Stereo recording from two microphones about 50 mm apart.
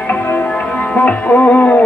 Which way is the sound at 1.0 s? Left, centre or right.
Left.